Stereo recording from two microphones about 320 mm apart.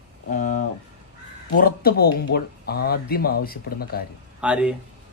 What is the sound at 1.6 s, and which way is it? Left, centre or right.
Speech, left.